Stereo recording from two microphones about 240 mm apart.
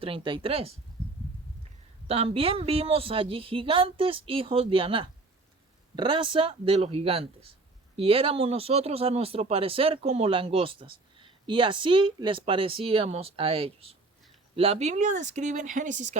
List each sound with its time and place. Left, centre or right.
0.0 s speech: right
2.0 s speech: right